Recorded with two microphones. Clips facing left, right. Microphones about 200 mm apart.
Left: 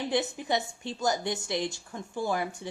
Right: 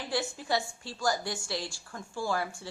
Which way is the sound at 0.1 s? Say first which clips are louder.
Even; 20° left (ahead or behind).